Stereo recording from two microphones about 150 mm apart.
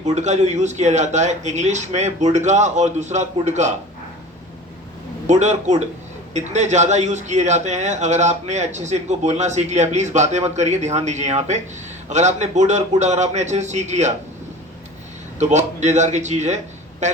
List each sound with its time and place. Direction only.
0.0 s speech: 50° right (ahead or behind)
5.2 s speech: 50° right (ahead or behind)
15.4 s speech: 50° right (ahead or behind)